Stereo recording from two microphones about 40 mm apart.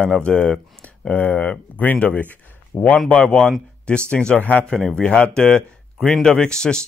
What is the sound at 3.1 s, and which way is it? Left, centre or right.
Speech, left.